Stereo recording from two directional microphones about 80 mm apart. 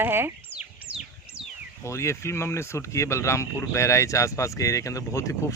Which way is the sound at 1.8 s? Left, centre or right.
Left.